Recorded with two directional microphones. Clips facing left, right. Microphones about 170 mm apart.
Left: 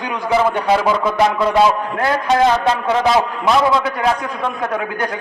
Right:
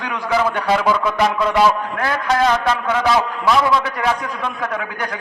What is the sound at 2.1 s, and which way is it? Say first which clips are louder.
A man's voice: left 3 dB; 25° left (ahead or behind).